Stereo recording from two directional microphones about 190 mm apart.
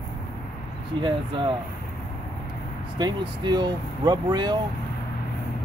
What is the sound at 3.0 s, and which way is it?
Speech, 25° right (ahead or behind).